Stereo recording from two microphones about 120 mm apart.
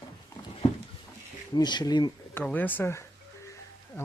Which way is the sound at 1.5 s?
35° left (ahead or behind).